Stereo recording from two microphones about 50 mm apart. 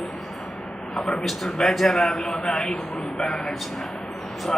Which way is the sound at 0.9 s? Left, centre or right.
Centre.